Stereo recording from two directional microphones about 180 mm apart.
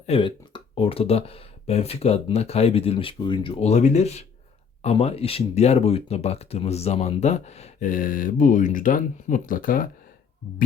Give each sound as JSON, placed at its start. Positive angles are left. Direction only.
{"t": 0.0, "sound": "speech", "side_deg": 30}